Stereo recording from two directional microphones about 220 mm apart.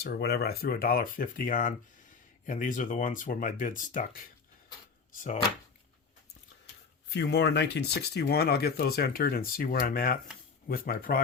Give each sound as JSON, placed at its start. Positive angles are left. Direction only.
{"t": 0.0, "sound": "speech", "side_deg": 45}
{"t": 7.1, "sound": "speech", "side_deg": 50}